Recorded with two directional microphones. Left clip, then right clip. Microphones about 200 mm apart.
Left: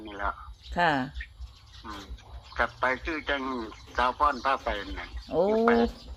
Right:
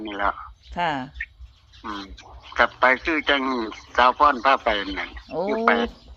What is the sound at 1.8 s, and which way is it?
Speech, 35° right (ahead or behind).